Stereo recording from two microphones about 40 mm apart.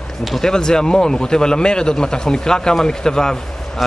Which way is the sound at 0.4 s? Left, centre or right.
Centre.